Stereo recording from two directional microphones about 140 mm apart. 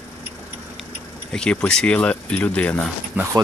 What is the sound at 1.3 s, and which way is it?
Speech, 5° left (ahead or behind).